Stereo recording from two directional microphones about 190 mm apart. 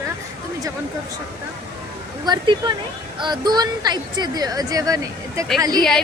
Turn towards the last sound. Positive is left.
turn(degrees=-20)  # may be behind; listen again after turning